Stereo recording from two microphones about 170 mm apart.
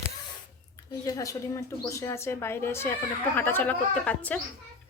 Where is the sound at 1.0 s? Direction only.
20° left (ahead or behind).